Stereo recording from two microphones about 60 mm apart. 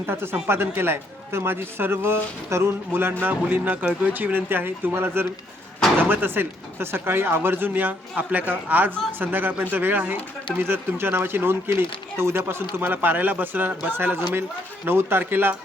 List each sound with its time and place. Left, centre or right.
0.0 s speech: right